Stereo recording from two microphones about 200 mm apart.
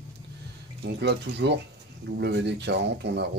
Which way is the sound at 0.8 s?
60° right (ahead or behind).